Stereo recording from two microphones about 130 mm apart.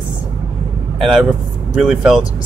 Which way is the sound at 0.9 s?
Centre (ahead or behind).